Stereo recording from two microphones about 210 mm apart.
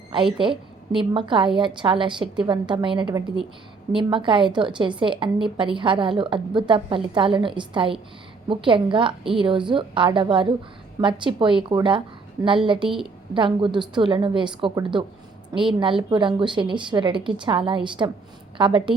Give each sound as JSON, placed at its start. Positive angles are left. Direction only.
{"t": 0.3, "sound": "a woman's voice", "side_deg": -25}